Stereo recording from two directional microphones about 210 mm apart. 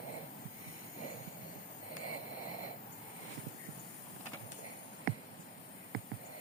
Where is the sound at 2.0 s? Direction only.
40° left (ahead or behind).